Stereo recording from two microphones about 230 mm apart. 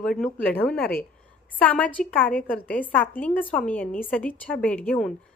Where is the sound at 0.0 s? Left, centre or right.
Centre.